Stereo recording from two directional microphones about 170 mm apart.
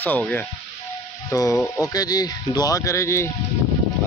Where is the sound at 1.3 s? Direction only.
20° left (ahead or behind).